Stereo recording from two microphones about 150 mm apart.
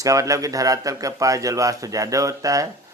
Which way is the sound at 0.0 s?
20° right (ahead or behind).